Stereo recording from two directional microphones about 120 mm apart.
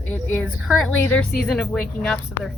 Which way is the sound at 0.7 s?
Centre (ahead or behind).